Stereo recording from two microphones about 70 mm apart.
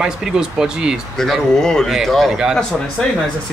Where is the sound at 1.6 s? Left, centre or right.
Centre.